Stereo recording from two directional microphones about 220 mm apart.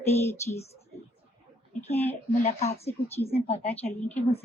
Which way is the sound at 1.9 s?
10° left (ahead or behind).